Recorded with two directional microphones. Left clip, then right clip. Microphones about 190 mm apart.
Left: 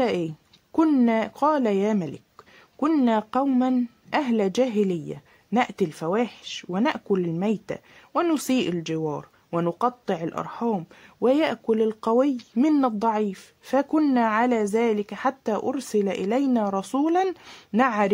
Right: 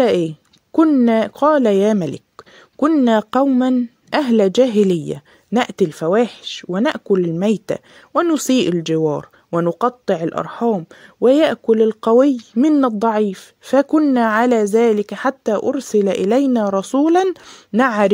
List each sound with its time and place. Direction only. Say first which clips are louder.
0.0 s a woman's voice: right 9 dB; 30° right (ahead or behind)
0.7 s speech: right 7 dB; 20° right (ahead or behind)
1.0 s a woman's voice: right 7 dB; 35° right (ahead or behind)
12.4 s a woman's voice: right 7 dB; 20° right (ahead or behind)